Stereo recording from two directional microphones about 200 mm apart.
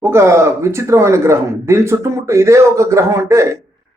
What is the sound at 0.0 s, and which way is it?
Speech, 10° right (ahead or behind).